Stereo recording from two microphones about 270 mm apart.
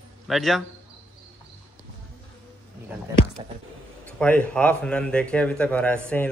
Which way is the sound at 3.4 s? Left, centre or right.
Centre.